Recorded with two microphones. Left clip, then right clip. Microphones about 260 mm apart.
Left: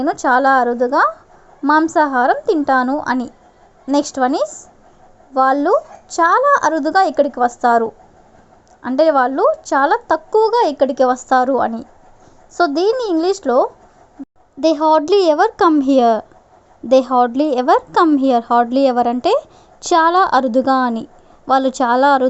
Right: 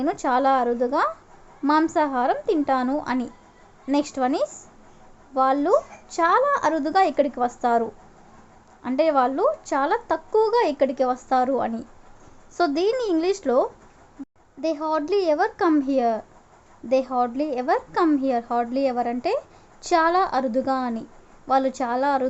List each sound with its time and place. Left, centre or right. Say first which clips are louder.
0.0 s a woman's voice: left 7 dB; centre
14.6 s a woman's voice: left 11 dB; left